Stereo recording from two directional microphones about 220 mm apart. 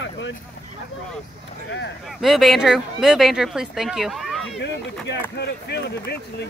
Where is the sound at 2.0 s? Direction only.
Centre (ahead or behind).